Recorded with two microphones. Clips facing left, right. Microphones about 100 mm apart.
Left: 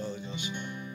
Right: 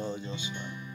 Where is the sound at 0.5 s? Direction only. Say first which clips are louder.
Left 2 dB; 15° left (ahead or behind).